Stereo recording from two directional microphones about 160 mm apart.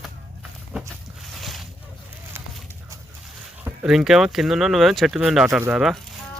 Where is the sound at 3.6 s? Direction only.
5° right (ahead or behind).